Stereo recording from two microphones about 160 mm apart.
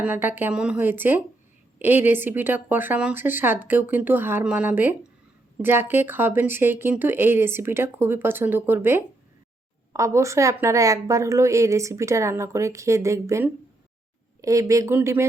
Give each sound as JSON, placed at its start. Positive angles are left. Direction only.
{"t": 0.0, "sound": "a woman's voice", "side_deg": -10}